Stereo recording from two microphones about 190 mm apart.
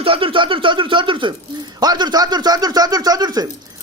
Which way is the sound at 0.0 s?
30° right (ahead or behind).